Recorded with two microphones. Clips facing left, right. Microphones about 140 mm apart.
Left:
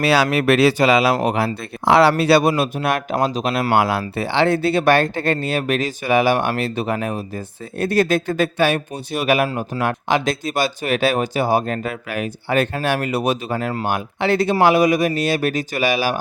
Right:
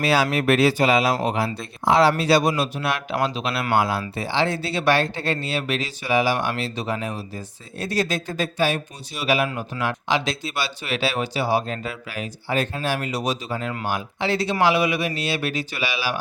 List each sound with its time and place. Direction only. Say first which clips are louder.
0.0 s speech: left 4 dB; 75° left (ahead or behind)
1.1 s speech: left 4 dB; 65° left (ahead or behind); by 3.7 s 40° left (ahead or behind)
3.7 s speech: left 2 dB; 65° left (ahead or behind); by 16.1 s 45° left (ahead or behind)